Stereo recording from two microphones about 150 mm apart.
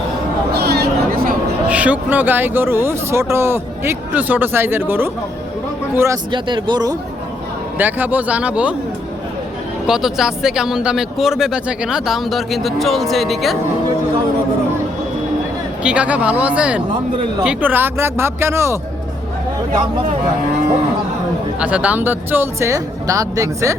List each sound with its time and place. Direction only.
0.5 s a sound: 90° right; by 1.4 s 75° right (ahead or behind)
1.7 s speech: 10° right (ahead or behind)
6.3 s speech: 30° right (ahead or behind)
7.8 s speech: 10° right (ahead or behind)
9.8 s speech: 5° right (ahead or behind)
15.8 s speech: 5° right (ahead or behind)
21.6 s speech: 10° right (ahead or behind)